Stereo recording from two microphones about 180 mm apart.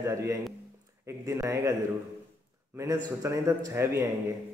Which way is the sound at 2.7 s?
20° right (ahead or behind).